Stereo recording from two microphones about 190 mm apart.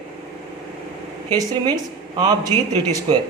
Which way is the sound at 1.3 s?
20° right (ahead or behind).